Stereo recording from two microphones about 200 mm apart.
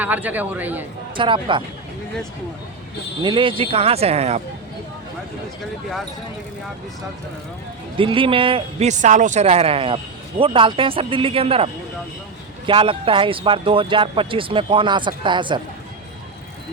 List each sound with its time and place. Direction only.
0.0 s a man's voice: 10° right (ahead or behind)
1.1 s speech: 25° right (ahead or behind)
3.2 s speech: 25° right (ahead or behind)
7.9 s speech: 25° right (ahead or behind)